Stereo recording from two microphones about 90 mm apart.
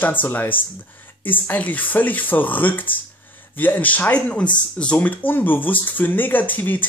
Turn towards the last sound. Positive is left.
turn(degrees=20)  # may be behind; listen again after turning